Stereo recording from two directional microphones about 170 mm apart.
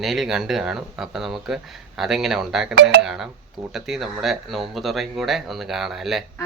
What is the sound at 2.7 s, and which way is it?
Speech, 65° right (ahead or behind).